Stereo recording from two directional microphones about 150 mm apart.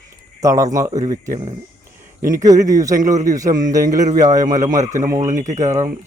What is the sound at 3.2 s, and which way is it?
Speech, 25° right (ahead or behind).